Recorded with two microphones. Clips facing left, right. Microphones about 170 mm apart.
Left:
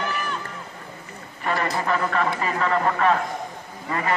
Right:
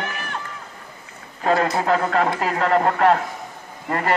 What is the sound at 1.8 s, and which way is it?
A man's voice, 55° right (ahead or behind).